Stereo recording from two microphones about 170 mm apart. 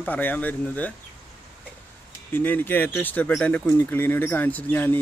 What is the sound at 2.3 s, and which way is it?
Speech, 10° left (ahead or behind).